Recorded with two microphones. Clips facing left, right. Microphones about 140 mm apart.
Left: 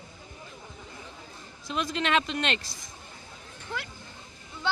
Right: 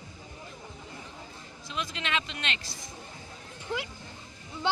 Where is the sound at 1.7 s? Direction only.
45° left (ahead or behind).